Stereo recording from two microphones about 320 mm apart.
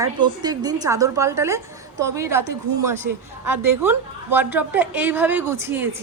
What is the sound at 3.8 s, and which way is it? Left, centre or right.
A woman's voice, centre.